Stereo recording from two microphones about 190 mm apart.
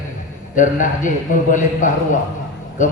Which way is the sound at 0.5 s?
40° left (ahead or behind).